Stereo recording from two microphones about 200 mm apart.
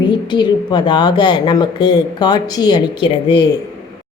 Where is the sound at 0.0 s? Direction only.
20° left (ahead or behind).